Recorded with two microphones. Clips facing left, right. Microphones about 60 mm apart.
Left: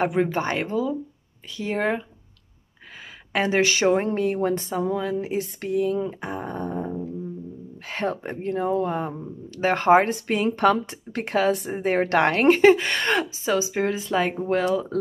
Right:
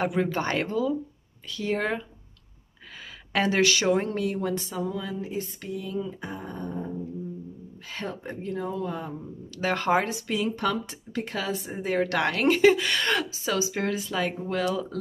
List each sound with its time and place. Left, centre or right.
0.0 s speech: left
3.3 s speech: centre; by 9.1 s left
9.1 s a woman's voice: left
10.1 s speech: left
11.7 s a woman's voice: left
14.0 s a woman's voice: left